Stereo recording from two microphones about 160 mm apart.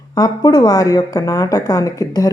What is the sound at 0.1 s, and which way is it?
Speech, 25° left (ahead or behind).